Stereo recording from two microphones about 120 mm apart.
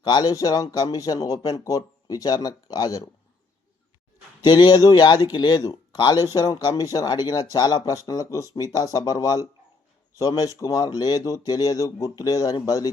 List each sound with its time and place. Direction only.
0.0 s speech: 35° left (ahead or behind)
4.4 s speech: 35° left (ahead or behind)